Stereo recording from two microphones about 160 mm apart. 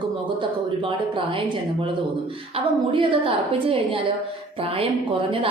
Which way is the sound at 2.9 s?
35° right (ahead or behind).